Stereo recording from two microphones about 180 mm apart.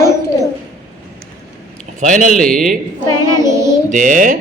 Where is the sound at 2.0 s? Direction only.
45° right (ahead or behind).